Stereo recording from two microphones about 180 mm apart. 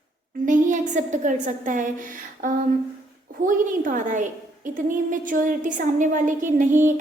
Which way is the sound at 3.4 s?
45° right (ahead or behind).